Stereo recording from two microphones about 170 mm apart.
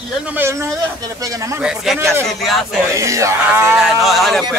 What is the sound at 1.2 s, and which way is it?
Speech, 20° right (ahead or behind).